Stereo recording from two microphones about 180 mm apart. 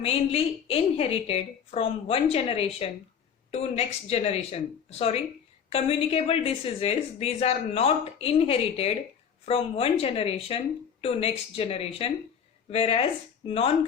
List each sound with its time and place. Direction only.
0.0 s a woman's voice: 35° left (ahead or behind)